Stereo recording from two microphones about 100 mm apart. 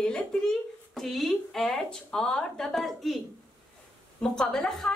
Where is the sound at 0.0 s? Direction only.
10° left (ahead or behind).